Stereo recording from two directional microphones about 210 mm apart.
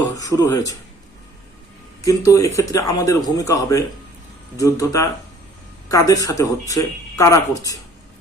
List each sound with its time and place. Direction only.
0.2 s speech: 15° left (ahead or behind)
2.0 s speech: 15° left (ahead or behind)